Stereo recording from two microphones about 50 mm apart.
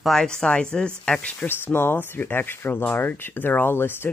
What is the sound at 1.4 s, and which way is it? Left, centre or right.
Speech, left.